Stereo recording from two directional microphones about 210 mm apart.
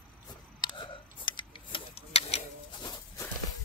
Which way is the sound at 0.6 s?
20° left (ahead or behind).